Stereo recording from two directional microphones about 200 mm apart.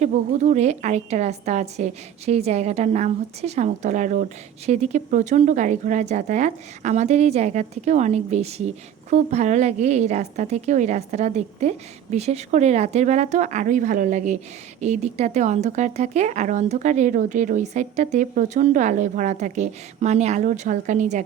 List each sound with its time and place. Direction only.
0.0 s a woman's voice: 35° right (ahead or behind)